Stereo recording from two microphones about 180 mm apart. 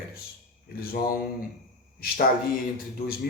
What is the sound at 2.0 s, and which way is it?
Speech, 55° left (ahead or behind).